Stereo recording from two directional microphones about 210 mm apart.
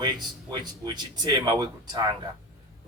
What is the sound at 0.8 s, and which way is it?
Speech, 20° right (ahead or behind).